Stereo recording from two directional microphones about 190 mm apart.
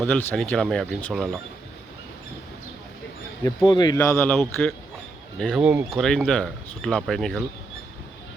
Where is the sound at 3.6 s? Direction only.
25° left (ahead or behind).